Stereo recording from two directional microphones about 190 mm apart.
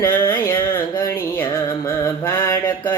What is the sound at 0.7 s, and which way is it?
Mantra, 10° left (ahead or behind).